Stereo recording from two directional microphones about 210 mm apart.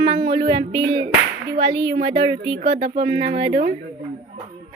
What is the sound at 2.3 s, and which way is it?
Speech, 55° right (ahead or behind).